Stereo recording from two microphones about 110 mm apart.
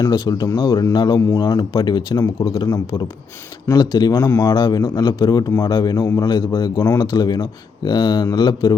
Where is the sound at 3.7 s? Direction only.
40° left (ahead or behind).